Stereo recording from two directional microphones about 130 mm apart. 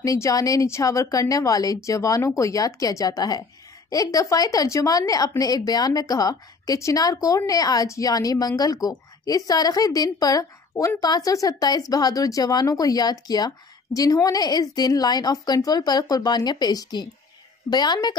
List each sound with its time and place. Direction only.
0.0 s a woman's voice: 25° left (ahead or behind)